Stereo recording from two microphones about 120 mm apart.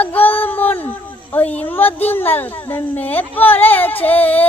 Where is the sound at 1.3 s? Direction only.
15° left (ahead or behind).